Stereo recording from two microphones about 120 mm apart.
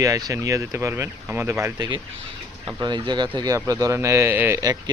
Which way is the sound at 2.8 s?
35° right (ahead or behind).